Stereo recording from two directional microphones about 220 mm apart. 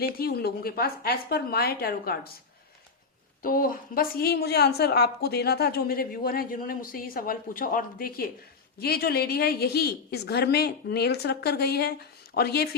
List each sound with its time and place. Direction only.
0.0 s a woman's voice: 45° left (ahead or behind)
3.4 s a woman's voice: 40° left (ahead or behind)